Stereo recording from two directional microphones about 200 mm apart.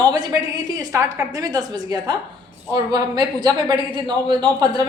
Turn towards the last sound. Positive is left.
turn(degrees=-20)  # may be behind; listen again after turning